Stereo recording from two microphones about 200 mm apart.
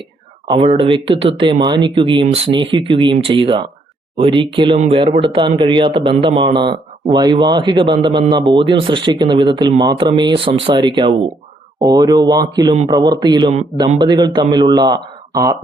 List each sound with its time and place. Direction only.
0.4 s speech: 25° right (ahead or behind)